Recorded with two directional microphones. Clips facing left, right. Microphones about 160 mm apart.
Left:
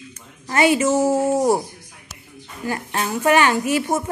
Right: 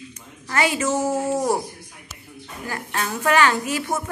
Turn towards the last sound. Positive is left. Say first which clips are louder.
# left 5 dB
turn(degrees=20)  # may be behind; listen again after turning